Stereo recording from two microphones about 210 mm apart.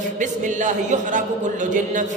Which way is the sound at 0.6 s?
35° right (ahead or behind).